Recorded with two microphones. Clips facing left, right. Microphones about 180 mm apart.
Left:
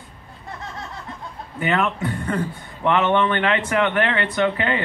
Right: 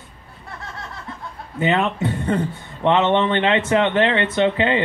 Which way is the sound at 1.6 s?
25° right (ahead or behind).